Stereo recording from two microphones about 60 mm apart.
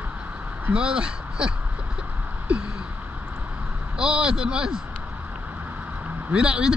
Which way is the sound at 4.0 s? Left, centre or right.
Centre.